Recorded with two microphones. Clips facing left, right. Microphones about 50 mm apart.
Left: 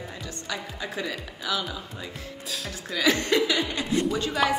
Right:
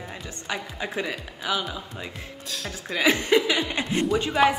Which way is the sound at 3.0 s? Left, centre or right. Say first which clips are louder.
Right 2 dB; right.